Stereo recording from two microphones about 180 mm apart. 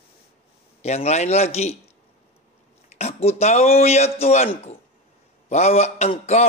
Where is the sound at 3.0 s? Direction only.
35° left (ahead or behind).